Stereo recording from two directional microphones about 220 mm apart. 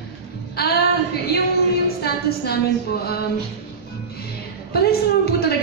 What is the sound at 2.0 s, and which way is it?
A woman's voice, 45° left (ahead or behind).